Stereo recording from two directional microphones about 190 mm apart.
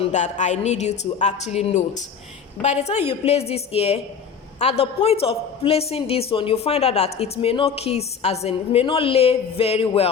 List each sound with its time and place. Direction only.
0.0 s a woman's voice: 35° left (ahead or behind)